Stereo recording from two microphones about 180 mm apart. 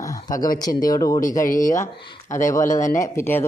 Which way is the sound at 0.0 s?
20° left (ahead or behind).